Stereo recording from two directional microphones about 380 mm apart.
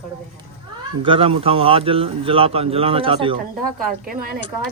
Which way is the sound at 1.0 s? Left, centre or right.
Centre.